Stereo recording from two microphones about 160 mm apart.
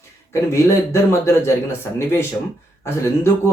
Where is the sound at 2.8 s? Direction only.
15° left (ahead or behind).